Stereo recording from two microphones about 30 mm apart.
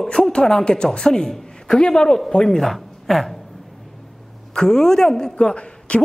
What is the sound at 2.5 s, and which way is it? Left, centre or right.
Speech, centre.